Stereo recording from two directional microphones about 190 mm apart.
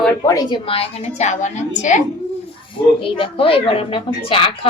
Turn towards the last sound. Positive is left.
turn(degrees=25)  # may be behind; listen again after turning